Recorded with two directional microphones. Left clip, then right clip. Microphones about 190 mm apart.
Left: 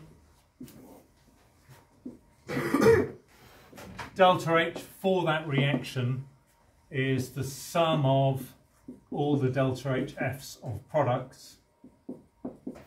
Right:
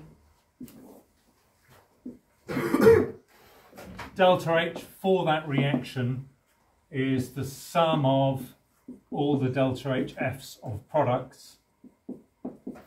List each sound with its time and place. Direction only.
2.4 s throat clearing: 20° right (ahead or behind)
4.1 s speech: 15° left (ahead or behind)